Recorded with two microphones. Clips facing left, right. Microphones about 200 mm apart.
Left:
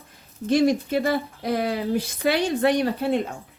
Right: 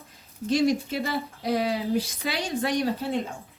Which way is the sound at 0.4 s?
55° left (ahead or behind).